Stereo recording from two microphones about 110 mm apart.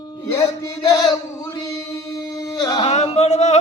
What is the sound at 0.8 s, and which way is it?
Singing, 35° left (ahead or behind).